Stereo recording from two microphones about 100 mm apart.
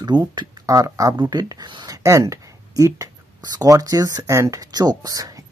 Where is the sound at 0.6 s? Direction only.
35° right (ahead or behind).